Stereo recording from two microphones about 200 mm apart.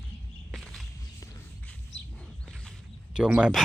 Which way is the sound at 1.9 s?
70° left (ahead or behind).